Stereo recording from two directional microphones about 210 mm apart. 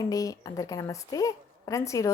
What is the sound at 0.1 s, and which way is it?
A woman's voice, 15° left (ahead or behind).